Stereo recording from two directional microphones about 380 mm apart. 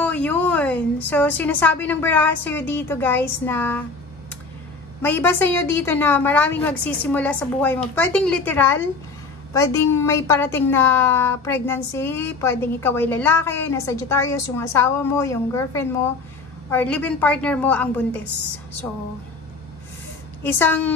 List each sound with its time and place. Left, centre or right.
0.0 s a woman's voice: centre
5.0 s a woman's voice: centre
20.4 s a woman's voice: centre